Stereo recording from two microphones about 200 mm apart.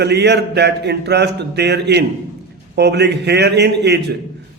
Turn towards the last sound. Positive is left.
turn(degrees=-55)  # may be behind; listen again after turning